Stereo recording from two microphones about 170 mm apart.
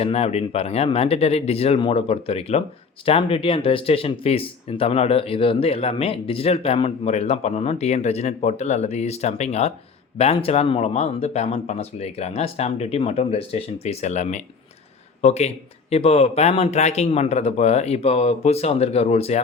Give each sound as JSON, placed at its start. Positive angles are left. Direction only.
{"t": 0.0, "sound": "speech", "side_deg": 35}